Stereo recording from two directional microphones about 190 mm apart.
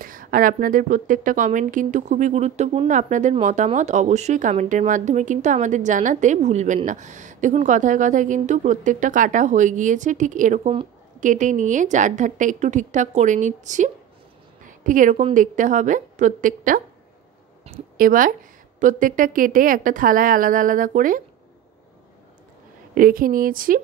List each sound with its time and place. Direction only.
0.0 s a woman's voice: 45° right (ahead or behind)
14.6 s a sound: 45° right (ahead or behind)
15.3 s a woman's voice: 45° right (ahead or behind)
17.9 s a woman's voice: 45° right (ahead or behind)
22.9 s a woman's voice: 50° right (ahead or behind)